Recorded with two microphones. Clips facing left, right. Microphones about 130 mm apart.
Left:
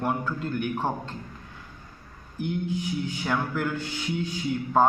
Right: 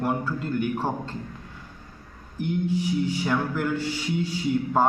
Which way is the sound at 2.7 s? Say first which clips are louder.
Right 5 dB; 35° right (ahead or behind).